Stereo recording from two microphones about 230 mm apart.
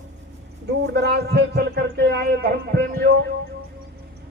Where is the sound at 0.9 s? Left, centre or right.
Right.